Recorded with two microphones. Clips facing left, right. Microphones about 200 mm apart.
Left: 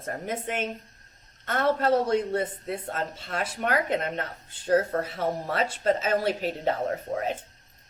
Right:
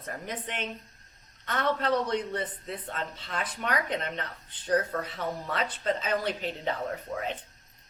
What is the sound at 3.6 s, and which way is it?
A woman's voice, 30° left (ahead or behind).